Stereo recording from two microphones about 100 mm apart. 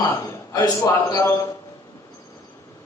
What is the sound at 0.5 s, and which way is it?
Speech, 40° left (ahead or behind).